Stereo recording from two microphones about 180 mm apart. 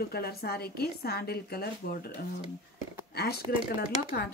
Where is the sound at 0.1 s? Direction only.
60° left (ahead or behind).